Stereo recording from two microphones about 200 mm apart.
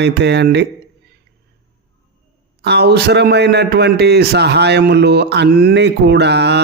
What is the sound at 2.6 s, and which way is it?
A man's voice, 55° right (ahead or behind).